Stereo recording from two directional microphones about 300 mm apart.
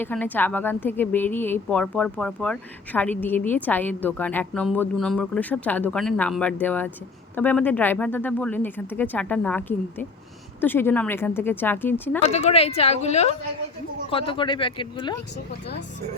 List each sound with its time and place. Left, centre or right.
0.0 s a woman's voice: centre
12.3 s speech: left